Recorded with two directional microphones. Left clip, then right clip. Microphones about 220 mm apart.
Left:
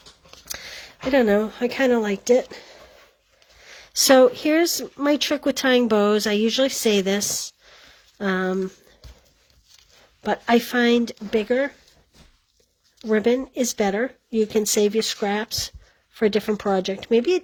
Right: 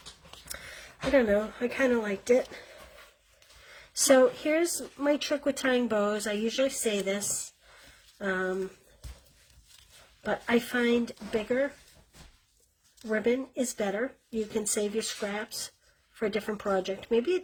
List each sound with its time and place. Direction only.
1.1 s speech: 45° left (ahead or behind)
4.0 s speech: 45° left (ahead or behind)
10.2 s speech: 45° left (ahead or behind)
13.1 s speech: 45° left (ahead or behind)